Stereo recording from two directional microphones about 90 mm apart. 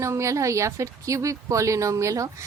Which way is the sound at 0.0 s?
35° right (ahead or behind).